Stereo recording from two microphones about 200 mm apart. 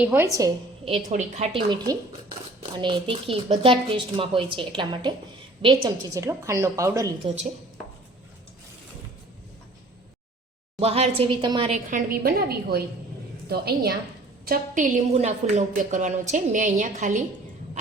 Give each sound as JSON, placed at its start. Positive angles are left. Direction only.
{"t": 0.0, "sound": "speech", "side_deg": -5}
{"t": 0.9, "sound": "a woman's voice", "side_deg": -25}
{"t": 2.7, "sound": "a woman's voice", "side_deg": -25}
{"t": 6.2, "sound": "speech", "side_deg": -15}
{"t": 10.8, "sound": "a woman's voice", "side_deg": -30}
{"t": 11.9, "sound": "a woman's voice", "side_deg": -45}